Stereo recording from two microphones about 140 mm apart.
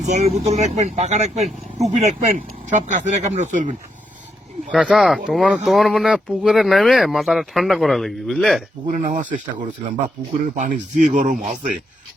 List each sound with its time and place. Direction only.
0.0 s speech: 50° right (ahead or behind)
4.7 s speech: 5° right (ahead or behind)
8.9 s speech: 65° right (ahead or behind)